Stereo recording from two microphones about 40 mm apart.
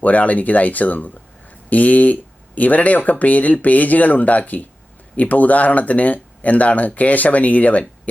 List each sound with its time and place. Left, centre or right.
0.0 s speech: left